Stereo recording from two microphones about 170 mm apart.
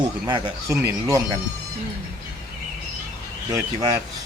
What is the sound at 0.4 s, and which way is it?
Speech, 15° right (ahead or behind).